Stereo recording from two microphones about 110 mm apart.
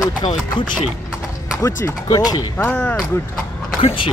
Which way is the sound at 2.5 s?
10° left (ahead or behind).